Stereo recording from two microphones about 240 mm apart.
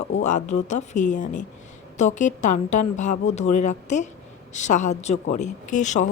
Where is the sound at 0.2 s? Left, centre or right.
Left.